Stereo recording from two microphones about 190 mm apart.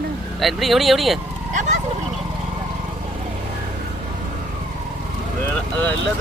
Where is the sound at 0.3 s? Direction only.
Centre (ahead or behind).